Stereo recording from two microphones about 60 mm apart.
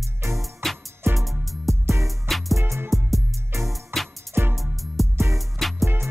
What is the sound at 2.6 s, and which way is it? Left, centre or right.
Music, right.